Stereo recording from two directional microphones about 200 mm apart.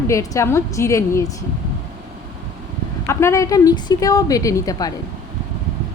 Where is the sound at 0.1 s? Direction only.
15° left (ahead or behind).